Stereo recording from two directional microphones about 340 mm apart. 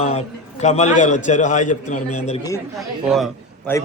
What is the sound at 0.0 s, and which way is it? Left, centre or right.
A man's voice, centre.